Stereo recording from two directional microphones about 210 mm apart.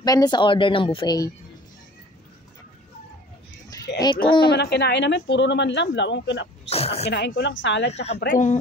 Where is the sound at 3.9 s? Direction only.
55° left (ahead or behind).